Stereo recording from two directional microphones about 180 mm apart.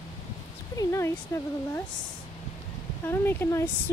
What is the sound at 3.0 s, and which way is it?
Speech, 10° left (ahead or behind).